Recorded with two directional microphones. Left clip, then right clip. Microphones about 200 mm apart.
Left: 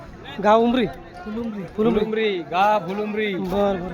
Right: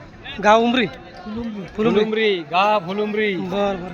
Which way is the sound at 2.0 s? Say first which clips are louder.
Right 3 dB; 45° right (ahead or behind).